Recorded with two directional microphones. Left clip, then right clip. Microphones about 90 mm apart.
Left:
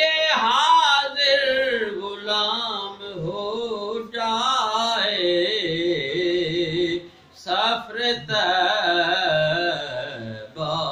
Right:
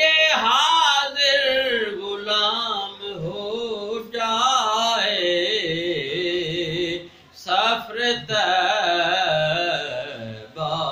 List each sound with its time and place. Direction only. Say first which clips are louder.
0.0 s a sound: right 2 dB; 45° left (ahead or behind)
2.2 s mantra: right 2 dB; 50° left (ahead or behind)
7.4 s music: right 2 dB; 50° left (ahead or behind)